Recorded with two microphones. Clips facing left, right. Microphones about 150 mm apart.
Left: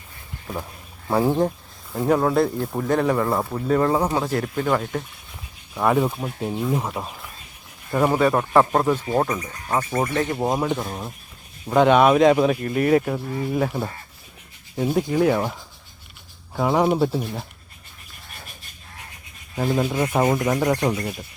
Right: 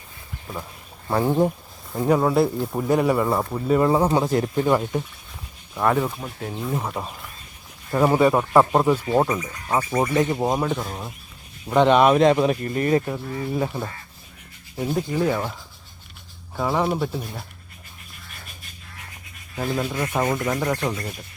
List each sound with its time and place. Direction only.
1.0 s speech: 5° left (ahead or behind)
5.7 s speech: 5° left (ahead or behind)
14.8 s speech: 10° left (ahead or behind)
16.6 s speech: 15° left (ahead or behind)
19.5 s speech: 15° left (ahead or behind)